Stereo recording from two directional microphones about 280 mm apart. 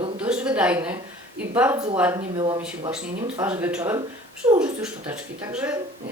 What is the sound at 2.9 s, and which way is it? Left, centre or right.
Speech, centre.